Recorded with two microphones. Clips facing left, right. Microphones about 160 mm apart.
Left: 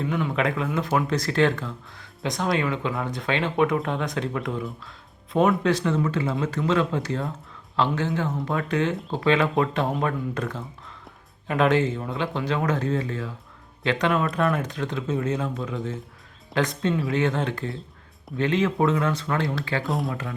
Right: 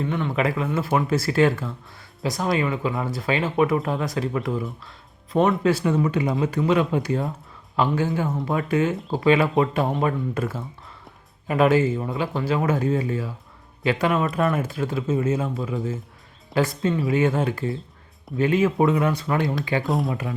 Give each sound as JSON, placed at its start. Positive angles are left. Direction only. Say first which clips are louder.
{"t": 0.0, "sound": "a man's voice", "louder": "right 1 dB", "side_deg": 0}
{"t": 19.8, "sound": "speech", "louder": "right 3 dB", "side_deg": 0}